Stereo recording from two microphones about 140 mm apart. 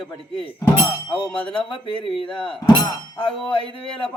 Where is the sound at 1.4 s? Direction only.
35° left (ahead or behind).